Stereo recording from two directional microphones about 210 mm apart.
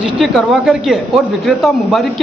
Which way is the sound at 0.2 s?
Centre (ahead or behind).